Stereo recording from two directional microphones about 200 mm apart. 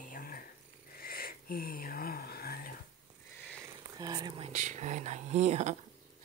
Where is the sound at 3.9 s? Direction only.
20° right (ahead or behind); by 5.7 s 35° right (ahead or behind).